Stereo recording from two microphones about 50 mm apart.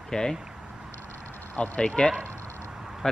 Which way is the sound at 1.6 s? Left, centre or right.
Centre.